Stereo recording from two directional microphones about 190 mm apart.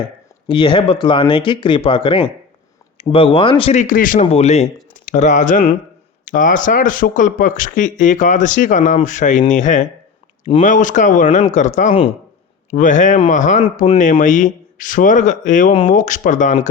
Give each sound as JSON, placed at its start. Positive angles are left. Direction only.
{"t": 0.4, "sound": "speech", "side_deg": 25}